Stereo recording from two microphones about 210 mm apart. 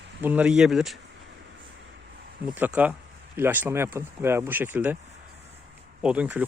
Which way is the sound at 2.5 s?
10° right (ahead or behind).